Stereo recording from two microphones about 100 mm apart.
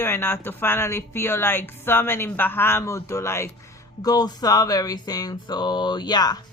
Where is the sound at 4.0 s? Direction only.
40° left (ahead or behind).